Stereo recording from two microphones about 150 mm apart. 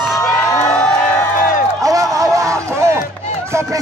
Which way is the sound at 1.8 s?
20° right (ahead or behind).